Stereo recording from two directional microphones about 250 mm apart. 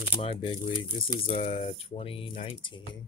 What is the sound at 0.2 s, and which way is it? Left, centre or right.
Speech, left.